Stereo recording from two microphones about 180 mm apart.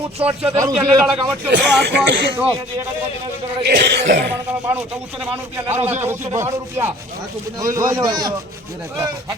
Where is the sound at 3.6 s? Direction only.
70° right (ahead or behind).